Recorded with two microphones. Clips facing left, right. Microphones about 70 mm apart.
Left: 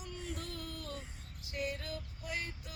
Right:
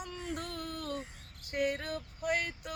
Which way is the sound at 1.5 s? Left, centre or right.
Right.